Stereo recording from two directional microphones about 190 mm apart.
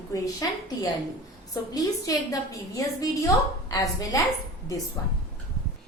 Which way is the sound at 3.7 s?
20° left (ahead or behind).